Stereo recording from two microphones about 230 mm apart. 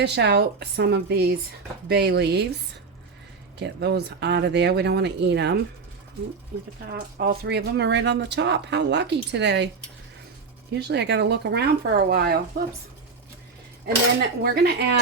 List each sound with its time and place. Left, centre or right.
0.0 s speech: right
3.6 s speech: right
6.9 s speech: right
10.8 s speech: right
13.8 s speech: right